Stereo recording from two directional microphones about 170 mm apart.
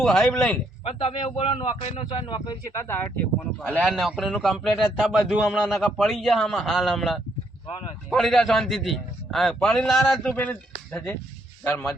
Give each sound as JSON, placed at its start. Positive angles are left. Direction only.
{"t": 0.0, "sound": "a man's voice", "side_deg": 5}
{"t": 0.9, "sound": "a man's voice", "side_deg": 30}
{"t": 2.8, "sound": "a man's voice", "side_deg": 15}